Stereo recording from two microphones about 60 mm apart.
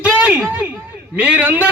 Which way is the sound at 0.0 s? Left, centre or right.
Right.